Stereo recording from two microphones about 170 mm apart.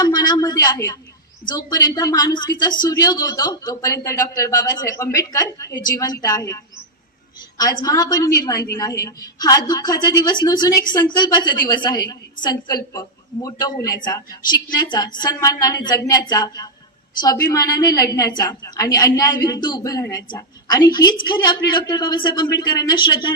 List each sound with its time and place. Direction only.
0.0 s a woman's voice: 25° left (ahead or behind)
7.6 s a woman's voice: 20° left (ahead or behind)